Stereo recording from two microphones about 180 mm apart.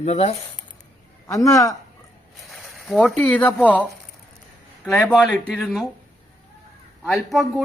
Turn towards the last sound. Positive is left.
turn(degrees=0)  # may be behind; listen again after turning